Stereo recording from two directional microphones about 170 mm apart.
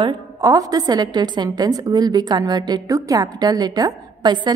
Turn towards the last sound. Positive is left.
turn(degrees=-25)  # may be behind; listen again after turning